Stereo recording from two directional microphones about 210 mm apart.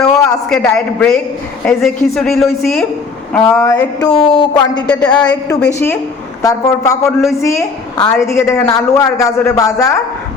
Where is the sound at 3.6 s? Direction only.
15° left (ahead or behind).